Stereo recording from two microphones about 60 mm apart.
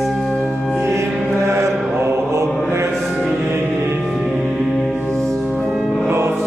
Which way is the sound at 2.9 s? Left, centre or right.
Centre.